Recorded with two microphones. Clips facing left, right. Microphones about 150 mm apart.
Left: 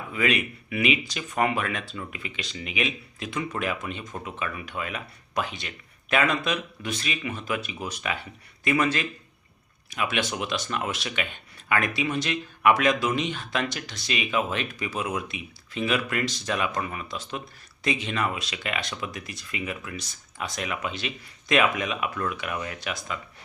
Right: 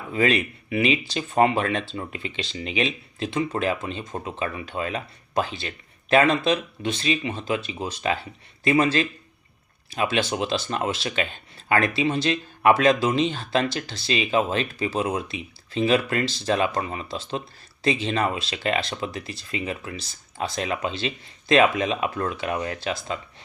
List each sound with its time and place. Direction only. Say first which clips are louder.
0.1 s speech: right 4 dB; 30° right (ahead or behind)